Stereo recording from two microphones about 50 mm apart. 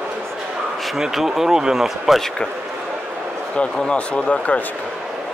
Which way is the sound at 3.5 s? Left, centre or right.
Centre.